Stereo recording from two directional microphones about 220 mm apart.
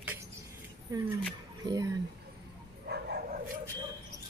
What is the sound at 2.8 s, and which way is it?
Bow-wow, 50° right (ahead or behind).